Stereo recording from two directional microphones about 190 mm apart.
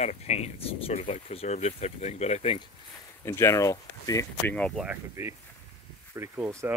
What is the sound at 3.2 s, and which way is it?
Speech, 15° left (ahead or behind).